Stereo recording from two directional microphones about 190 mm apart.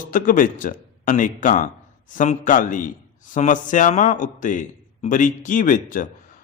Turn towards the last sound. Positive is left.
turn(degrees=45)  # may be behind; listen again after turning